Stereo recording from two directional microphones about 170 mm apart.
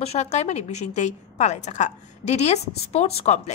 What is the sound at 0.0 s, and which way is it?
A woman's voice, 40° left (ahead or behind).